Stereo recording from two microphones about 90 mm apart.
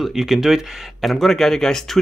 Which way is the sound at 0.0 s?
5° right (ahead or behind).